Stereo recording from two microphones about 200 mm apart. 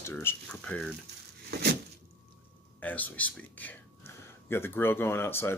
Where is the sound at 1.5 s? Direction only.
55° right (ahead or behind).